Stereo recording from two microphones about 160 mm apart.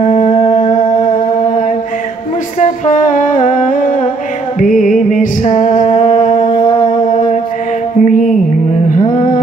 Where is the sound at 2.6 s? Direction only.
50° left (ahead or behind).